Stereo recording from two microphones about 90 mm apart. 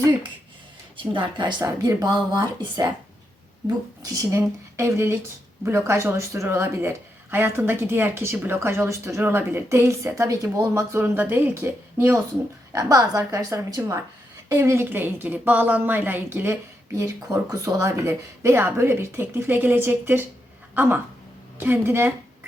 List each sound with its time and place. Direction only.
0.9 s a woman's voice: 70° right (ahead or behind); by 2.9 s 45° right (ahead or behind)
4.0 s a woman's voice: 40° right (ahead or behind)
11.0 s a woman's voice: 25° right (ahead or behind); by 13.9 s 40° right (ahead or behind)
14.5 s speech: 30° right (ahead or behind)
17.3 s a woman's voice: 40° right (ahead or behind)
18.1 s speech: 25° right (ahead or behind)